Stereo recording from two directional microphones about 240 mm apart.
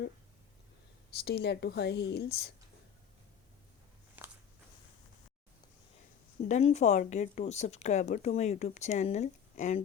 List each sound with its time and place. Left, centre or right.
1.2 s speech: left
4.2 s a sound: centre
6.5 s speech: left